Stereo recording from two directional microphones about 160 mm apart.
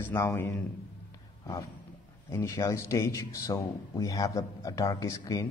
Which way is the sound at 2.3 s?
20° left (ahead or behind).